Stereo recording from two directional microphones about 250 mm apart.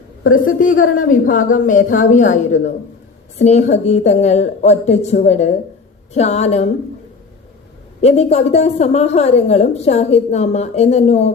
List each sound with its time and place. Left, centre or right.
0.3 s a woman's voice: left
8.0 s a woman's voice: left